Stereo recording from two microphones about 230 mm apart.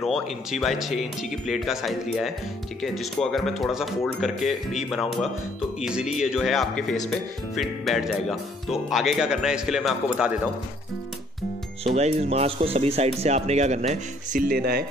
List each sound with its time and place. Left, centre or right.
0.0 s speech: centre
11.8 s speech: right